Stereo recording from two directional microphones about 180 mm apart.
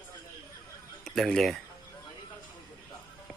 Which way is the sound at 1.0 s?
Centre (ahead or behind).